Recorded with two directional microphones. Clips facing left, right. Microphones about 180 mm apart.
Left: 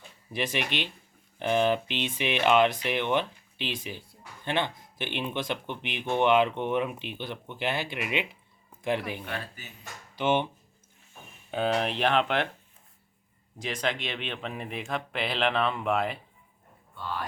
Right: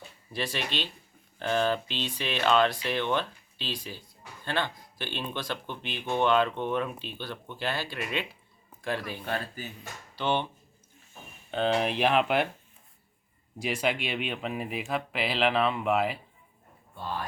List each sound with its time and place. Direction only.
0.3 s speech: 20° left (ahead or behind)
9.2 s speech: 30° right (ahead or behind)
10.2 s speech: 15° left (ahead or behind)
11.5 s speech: 5° left (ahead or behind)
13.6 s speech: 10° right (ahead or behind)